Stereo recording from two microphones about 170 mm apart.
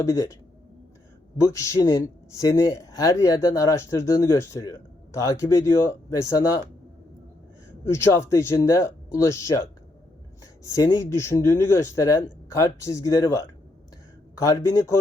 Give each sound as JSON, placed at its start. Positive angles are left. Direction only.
{"t": 0.0, "sound": "speech", "side_deg": 20}
{"t": 1.5, "sound": "speech", "side_deg": 20}
{"t": 7.9, "sound": "speech", "side_deg": 15}